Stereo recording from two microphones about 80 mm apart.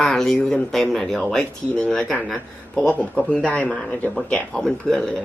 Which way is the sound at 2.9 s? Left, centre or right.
Centre.